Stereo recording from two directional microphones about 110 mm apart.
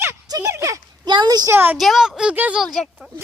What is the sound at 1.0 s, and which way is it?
Speech, 40° right (ahead or behind).